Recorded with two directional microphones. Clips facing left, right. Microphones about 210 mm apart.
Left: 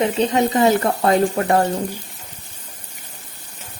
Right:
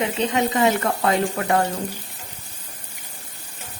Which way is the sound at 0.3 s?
35° left (ahead or behind).